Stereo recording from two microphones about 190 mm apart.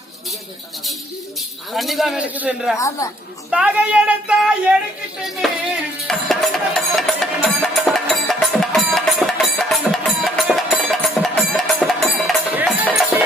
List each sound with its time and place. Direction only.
1.4 s speech: centre (ahead or behind)
2.7 s a woman's voice: 15° left (ahead or behind)
3.5 s speech: 5° right (ahead or behind)
5.2 s music: centre (ahead or behind)